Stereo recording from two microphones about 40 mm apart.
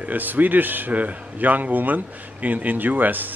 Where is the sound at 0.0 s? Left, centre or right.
Right.